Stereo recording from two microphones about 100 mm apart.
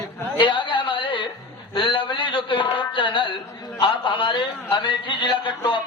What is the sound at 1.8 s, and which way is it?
A man's voice, 55° left (ahead or behind).